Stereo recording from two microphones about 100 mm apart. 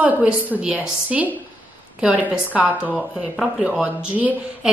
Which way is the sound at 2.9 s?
Centre (ahead or behind).